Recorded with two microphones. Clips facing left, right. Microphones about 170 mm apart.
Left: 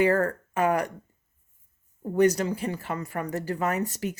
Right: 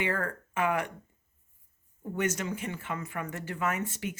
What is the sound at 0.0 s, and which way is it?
Speech, 40° left (ahead or behind).